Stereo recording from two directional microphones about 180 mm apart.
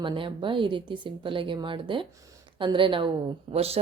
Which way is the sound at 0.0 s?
25° right (ahead or behind).